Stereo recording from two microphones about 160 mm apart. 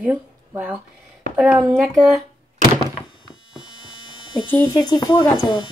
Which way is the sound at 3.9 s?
30° left (ahead or behind).